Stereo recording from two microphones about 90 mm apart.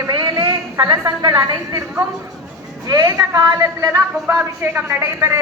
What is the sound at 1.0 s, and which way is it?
Speech, 40° right (ahead or behind).